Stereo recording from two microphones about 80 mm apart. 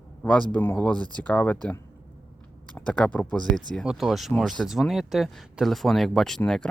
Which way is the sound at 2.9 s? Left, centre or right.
Centre.